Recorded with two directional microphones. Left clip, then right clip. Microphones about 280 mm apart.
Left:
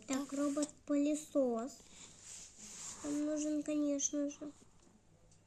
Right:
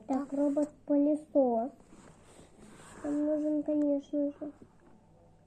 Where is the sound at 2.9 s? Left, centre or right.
Left.